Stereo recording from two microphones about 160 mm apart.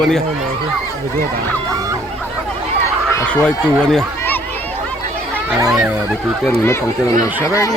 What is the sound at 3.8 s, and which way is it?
Speech, 5° left (ahead or behind).